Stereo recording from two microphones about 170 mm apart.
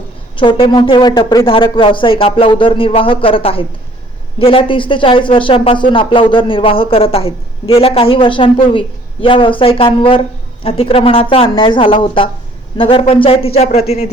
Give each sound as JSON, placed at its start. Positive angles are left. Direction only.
{"t": 0.3, "sound": "speech", "side_deg": 30}